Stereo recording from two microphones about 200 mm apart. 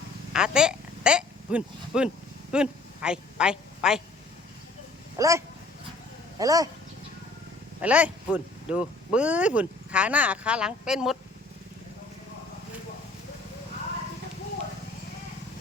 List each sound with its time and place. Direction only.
0.3 s a woman's voice: 5° right (ahead or behind)
5.1 s speech: 15° right (ahead or behind)
6.4 s speech: 15° right (ahead or behind)
7.8 s speech: 5° right (ahead or behind)